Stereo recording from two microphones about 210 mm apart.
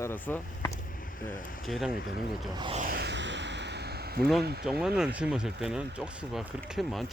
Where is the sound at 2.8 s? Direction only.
45° right (ahead or behind).